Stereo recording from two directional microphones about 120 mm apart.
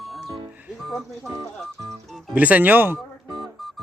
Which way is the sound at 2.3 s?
10° right (ahead or behind).